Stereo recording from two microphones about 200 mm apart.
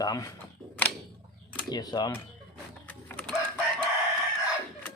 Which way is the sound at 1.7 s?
20° left (ahead or behind).